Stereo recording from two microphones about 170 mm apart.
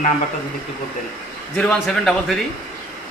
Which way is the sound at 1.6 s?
5° left (ahead or behind).